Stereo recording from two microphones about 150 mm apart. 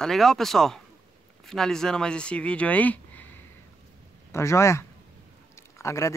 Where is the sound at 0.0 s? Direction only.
Centre (ahead or behind).